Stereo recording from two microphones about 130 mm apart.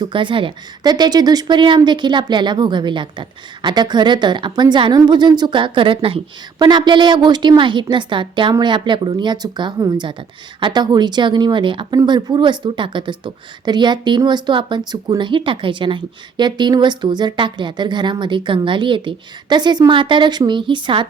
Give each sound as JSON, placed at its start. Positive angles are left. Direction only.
{"t": 0.0, "sound": "speech", "side_deg": -40}